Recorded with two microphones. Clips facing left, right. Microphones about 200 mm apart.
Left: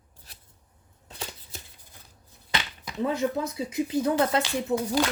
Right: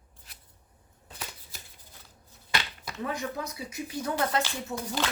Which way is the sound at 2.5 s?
20° left (ahead or behind).